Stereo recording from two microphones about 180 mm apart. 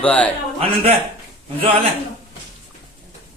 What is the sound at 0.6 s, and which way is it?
Speech, 35° right (ahead or behind).